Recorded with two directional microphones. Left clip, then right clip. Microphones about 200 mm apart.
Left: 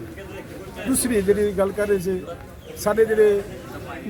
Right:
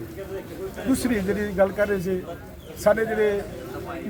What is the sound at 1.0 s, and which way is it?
Speech, centre (ahead or behind).